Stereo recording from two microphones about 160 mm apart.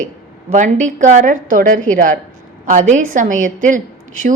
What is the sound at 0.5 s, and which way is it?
A woman's voice, 50° right (ahead or behind).